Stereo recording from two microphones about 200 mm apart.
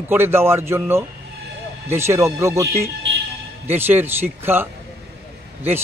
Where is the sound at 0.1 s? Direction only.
10° right (ahead or behind).